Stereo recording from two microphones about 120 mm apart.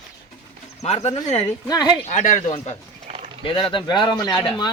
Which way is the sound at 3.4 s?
45° left (ahead or behind).